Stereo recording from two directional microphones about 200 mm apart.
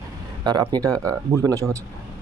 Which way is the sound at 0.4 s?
20° right (ahead or behind).